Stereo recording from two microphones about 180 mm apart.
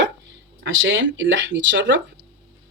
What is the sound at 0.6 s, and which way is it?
Speech, 90° right.